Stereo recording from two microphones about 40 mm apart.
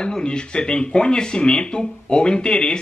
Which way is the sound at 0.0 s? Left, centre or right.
Left.